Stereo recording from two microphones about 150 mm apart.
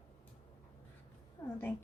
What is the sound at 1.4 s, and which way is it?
Cat, 20° left (ahead or behind).